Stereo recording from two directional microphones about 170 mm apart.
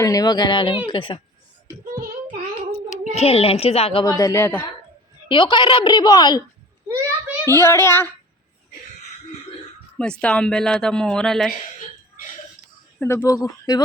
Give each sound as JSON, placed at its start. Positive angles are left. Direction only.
{"t": 0.0, "sound": "a woman's voice", "side_deg": 20}
{"t": 2.9, "sound": "a child's voice", "side_deg": 40}
{"t": 4.0, "sound": "a woman's voice", "side_deg": 20}
{"t": 5.3, "sound": "a woman's voice", "side_deg": 30}
{"t": 7.4, "sound": "speech", "side_deg": 15}
{"t": 10.0, "sound": "speech", "side_deg": 5}
{"t": 13.0, "sound": "a woman's voice", "side_deg": 15}